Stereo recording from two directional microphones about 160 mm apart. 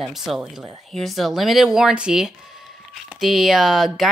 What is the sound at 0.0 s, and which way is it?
Speech, centre (ahead or behind).